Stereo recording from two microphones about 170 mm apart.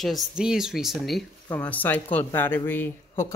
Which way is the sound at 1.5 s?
10° left (ahead or behind).